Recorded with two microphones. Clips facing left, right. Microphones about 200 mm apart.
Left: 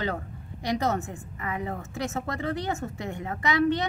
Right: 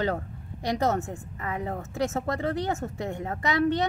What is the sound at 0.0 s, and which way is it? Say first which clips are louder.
A woman's voice: right 3 dB; 45° right (ahead or behind).